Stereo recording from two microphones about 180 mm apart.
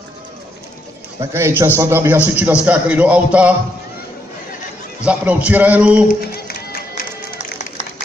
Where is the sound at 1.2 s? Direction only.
15° right (ahead or behind).